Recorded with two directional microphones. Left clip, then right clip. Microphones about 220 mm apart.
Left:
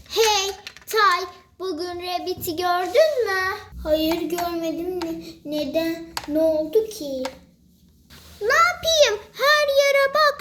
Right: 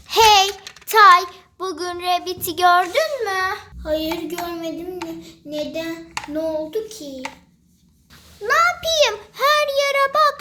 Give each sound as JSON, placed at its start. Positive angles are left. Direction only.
{"t": 0.1, "sound": "child singing", "side_deg": -35}
{"t": 3.9, "sound": "child singing", "side_deg": 0}
{"t": 8.4, "sound": "child singing", "side_deg": -15}